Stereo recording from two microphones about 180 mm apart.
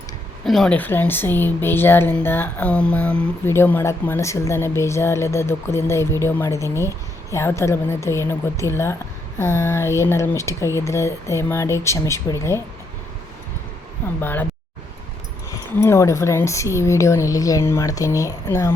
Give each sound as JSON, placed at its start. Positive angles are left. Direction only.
{"t": 0.4, "sound": "speech", "side_deg": 0}
{"t": 14.2, "sound": "speech", "side_deg": 10}
{"t": 15.8, "sound": "speech", "side_deg": 15}